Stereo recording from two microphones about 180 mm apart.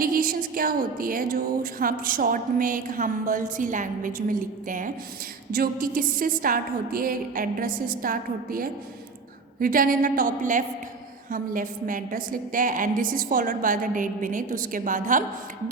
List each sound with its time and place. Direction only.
0.0 s a woman's voice: 55° right (ahead or behind)